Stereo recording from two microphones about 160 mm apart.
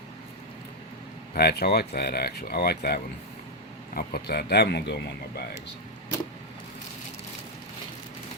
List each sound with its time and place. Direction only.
1.3 s speech: 80° left